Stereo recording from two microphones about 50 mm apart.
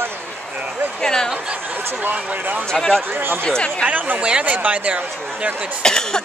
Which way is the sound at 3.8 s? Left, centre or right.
Right.